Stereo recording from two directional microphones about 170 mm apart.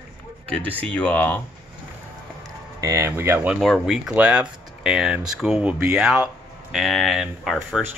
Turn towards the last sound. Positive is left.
turn(degrees=0)  # may be behind; listen again after turning